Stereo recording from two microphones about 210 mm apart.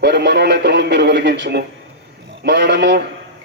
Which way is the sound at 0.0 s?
55° right (ahead or behind).